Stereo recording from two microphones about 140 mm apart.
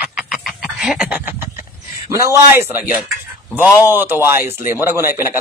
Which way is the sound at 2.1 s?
20° right (ahead or behind).